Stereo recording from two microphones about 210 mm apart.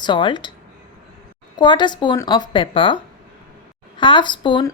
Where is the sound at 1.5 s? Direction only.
20° left (ahead or behind).